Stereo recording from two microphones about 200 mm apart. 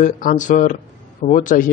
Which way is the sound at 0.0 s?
40° left (ahead or behind).